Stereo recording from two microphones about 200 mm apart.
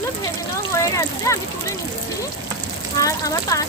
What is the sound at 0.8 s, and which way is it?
Speech, 15° left (ahead or behind).